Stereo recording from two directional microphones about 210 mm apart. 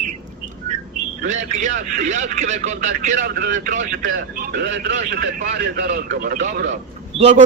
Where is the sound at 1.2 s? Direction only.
35° right (ahead or behind).